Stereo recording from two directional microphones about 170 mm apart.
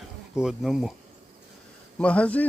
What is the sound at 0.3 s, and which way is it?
Speech, 5° right (ahead or behind).